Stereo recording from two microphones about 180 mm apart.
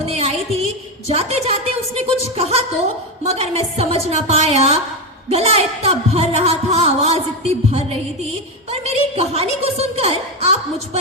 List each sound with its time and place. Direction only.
0.0 s music: 35° right (ahead or behind)
1.0 s speech: 35° right (ahead or behind)